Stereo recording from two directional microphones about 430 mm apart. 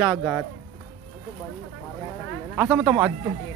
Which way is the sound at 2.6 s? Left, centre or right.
Centre.